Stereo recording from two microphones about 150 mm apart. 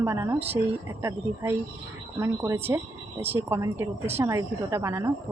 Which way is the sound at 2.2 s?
15° right (ahead or behind).